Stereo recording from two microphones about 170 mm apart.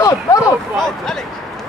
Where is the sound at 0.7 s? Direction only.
Centre (ahead or behind).